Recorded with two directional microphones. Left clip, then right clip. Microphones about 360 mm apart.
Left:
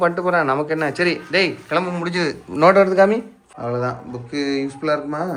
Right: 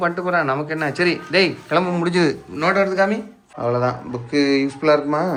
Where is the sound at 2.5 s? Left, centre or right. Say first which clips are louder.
Left 7 dB; centre.